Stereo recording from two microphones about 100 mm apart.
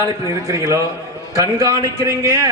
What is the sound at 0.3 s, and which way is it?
A man's voice, 30° right (ahead or behind).